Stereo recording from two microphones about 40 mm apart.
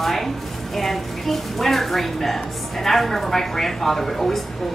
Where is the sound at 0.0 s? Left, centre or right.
Centre.